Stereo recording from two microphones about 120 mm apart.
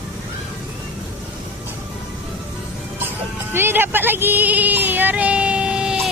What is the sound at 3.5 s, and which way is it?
Speech, 20° right (ahead or behind).